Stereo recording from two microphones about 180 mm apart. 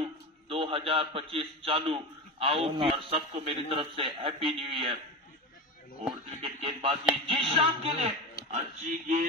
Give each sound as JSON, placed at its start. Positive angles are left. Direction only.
{"t": 0.0, "sound": "a man's voice", "side_deg": -30}
{"t": 6.4, "sound": "speech", "side_deg": -30}
{"t": 7.2, "sound": "music", "side_deg": -30}
{"t": 8.5, "sound": "speech", "side_deg": -45}